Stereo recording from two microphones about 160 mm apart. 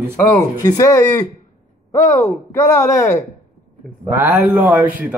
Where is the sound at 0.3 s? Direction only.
20° left (ahead or behind).